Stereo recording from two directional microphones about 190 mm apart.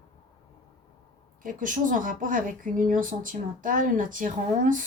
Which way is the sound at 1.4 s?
45° right (ahead or behind).